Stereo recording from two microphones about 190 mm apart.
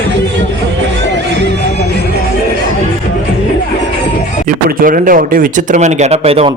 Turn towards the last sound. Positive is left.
turn(degrees=-35)  # may be behind; listen again after turning